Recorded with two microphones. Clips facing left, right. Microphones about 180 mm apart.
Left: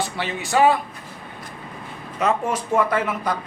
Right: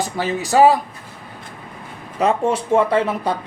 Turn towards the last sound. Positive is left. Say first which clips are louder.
# right 4 dB
turn(degrees=-30)  # may be behind; listen again after turning